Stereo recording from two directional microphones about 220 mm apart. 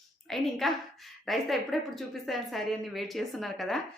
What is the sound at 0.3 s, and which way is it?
A woman's voice, centre (ahead or behind).